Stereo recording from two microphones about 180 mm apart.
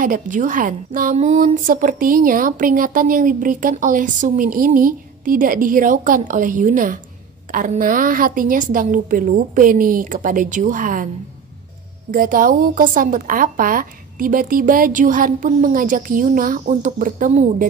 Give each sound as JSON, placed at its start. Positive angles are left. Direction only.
{"t": 0.0, "sound": "a woman's voice", "side_deg": -45}
{"t": 12.1, "sound": "a woman's voice", "side_deg": -50}